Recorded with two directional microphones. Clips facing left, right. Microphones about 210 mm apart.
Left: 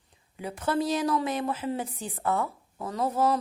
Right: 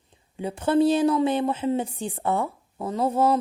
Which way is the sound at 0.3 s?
30° right (ahead or behind).